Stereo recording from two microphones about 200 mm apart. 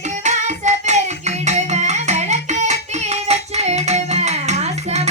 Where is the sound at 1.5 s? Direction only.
35° right (ahead or behind).